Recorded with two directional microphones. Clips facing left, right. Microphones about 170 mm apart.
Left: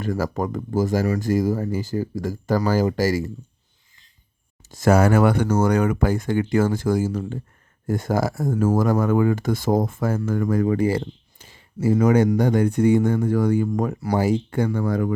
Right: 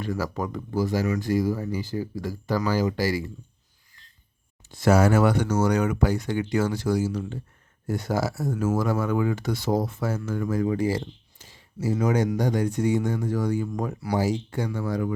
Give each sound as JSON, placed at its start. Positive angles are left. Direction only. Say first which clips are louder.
{"t": 0.0, "sound": "speech", "louder": "left 4 dB", "side_deg": 45}
{"t": 4.7, "sound": "speech", "louder": "left 3 dB", "side_deg": 50}